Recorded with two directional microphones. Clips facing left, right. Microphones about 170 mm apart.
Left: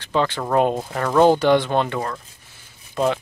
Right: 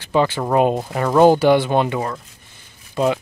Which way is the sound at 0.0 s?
10° right (ahead or behind).